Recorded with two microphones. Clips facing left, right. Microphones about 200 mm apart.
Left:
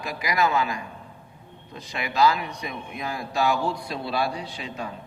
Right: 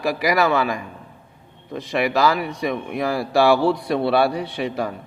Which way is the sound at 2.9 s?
85° right.